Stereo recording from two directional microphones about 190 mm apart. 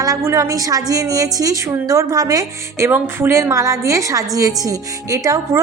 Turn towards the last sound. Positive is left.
turn(degrees=-15)  # may be behind; listen again after turning